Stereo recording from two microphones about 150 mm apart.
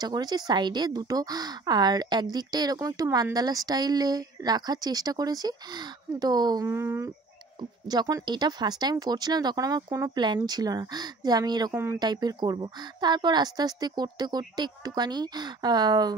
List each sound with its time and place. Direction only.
0.0 s speech: 25° right (ahead or behind)
7.9 s speech: 30° right (ahead or behind)
11.7 s speech: 15° right (ahead or behind)
12.0 s speech: 30° right (ahead or behind)